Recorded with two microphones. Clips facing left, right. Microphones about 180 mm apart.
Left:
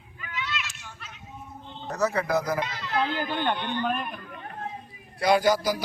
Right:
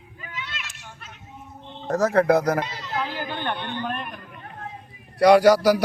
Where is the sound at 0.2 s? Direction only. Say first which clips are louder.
Left 3 dB; 45° right (ahead or behind).